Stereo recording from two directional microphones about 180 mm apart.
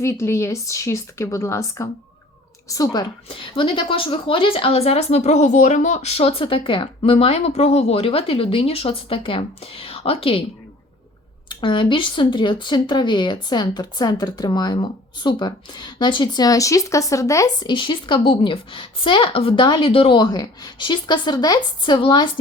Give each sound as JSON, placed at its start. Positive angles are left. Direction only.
{"t": 0.0, "sound": "a woman's voice", "side_deg": 15}
{"t": 11.4, "sound": "speech", "side_deg": 25}